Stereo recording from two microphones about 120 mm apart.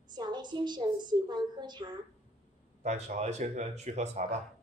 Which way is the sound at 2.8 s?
70° right (ahead or behind).